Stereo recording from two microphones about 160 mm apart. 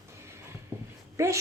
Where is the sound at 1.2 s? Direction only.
20° right (ahead or behind).